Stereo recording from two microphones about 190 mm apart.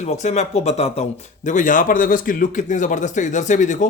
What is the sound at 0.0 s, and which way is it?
A man's voice, 35° left (ahead or behind).